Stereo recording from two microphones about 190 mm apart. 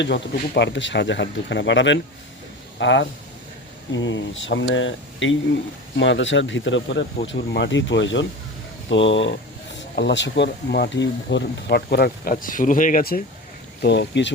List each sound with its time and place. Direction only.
0.0 s speech: 65° left (ahead or behind); by 5.4 s 85° left
6.0 s speech: 75° left (ahead or behind)
9.9 s speech: 65° left (ahead or behind); by 13.2 s 50° left (ahead or behind)
13.8 s speech: 65° left (ahead or behind)